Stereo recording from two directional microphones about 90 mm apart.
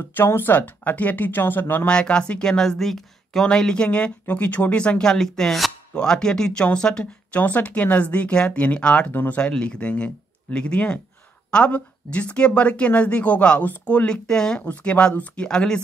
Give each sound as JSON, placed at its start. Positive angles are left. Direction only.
{"t": 0.1, "sound": "speech", "side_deg": 25}
{"t": 1.9, "sound": "speech", "side_deg": 10}